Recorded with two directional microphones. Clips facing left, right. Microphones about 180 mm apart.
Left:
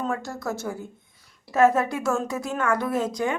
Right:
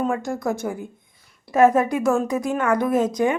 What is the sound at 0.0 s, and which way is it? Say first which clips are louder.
A woman's voice: right 5 dB; 15° right (ahead or behind).